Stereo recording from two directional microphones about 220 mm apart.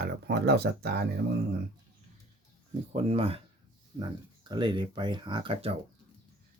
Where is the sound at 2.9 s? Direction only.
25° right (ahead or behind).